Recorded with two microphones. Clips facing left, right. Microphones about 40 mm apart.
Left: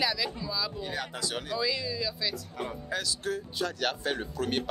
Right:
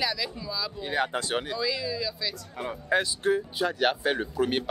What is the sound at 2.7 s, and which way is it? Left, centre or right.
Speech, right.